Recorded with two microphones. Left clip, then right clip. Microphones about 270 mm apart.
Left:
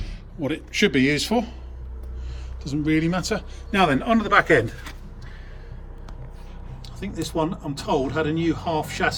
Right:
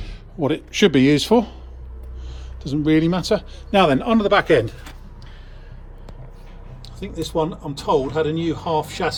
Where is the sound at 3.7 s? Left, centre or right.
Centre.